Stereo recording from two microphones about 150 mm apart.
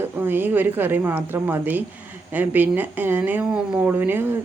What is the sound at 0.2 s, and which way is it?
A woman's voice, 15° right (ahead or behind).